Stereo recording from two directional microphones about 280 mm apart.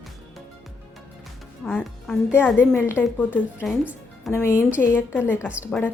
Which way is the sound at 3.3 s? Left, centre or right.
Centre.